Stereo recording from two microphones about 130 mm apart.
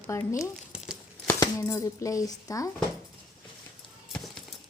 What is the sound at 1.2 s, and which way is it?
Speech, 20° left (ahead or behind).